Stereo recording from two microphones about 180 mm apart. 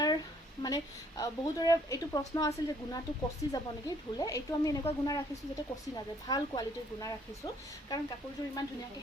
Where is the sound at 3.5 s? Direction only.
20° left (ahead or behind).